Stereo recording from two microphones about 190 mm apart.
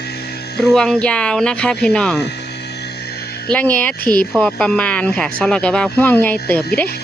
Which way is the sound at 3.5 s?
10° left (ahead or behind).